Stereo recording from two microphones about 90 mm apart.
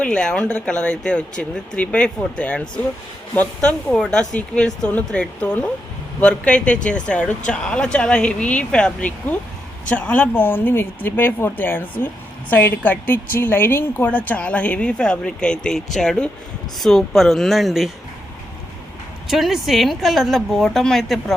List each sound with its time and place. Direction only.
0.0 s a woman's voice: 10° left (ahead or behind)
19.3 s a woman's voice: 5° right (ahead or behind)